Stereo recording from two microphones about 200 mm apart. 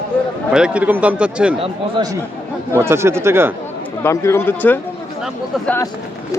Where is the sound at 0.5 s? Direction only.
5° right (ahead or behind).